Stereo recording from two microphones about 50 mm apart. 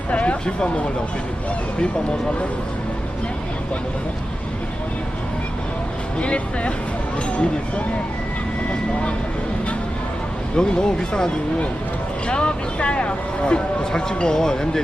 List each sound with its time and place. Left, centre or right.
0.1 s a sound: left
0.4 s speech: centre
6.1 s speech: left
10.5 s speech: centre
12.3 s speech: left